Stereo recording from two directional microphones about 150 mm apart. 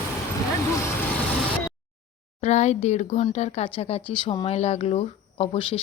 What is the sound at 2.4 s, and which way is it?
Speech, 50° left (ahead or behind).